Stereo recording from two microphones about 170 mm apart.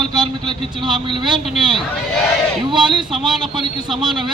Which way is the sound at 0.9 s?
25° right (ahead or behind).